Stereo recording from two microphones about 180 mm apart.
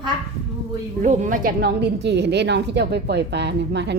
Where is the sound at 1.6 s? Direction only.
70° right (ahead or behind).